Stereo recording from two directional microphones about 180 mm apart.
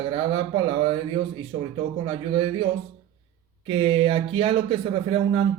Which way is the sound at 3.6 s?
30° right (ahead or behind).